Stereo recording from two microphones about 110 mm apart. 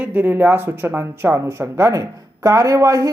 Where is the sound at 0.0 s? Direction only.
15° right (ahead or behind).